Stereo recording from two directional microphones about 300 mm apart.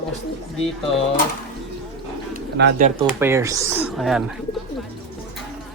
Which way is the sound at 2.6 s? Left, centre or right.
Right.